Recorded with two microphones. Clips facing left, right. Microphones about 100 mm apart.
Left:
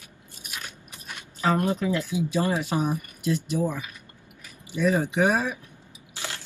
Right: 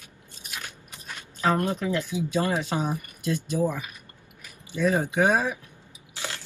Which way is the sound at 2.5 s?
25° right (ahead or behind).